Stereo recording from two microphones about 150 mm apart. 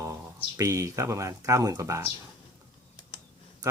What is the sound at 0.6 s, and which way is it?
Speech, 20° right (ahead or behind).